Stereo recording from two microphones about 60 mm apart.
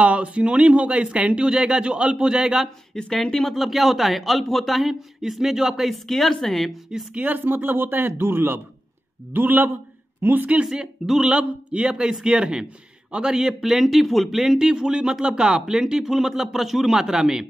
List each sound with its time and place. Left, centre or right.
0.0 s speech: right
2.9 s speech: centre
7.2 s speech: right
10.4 s speech: right
10.7 s speech: centre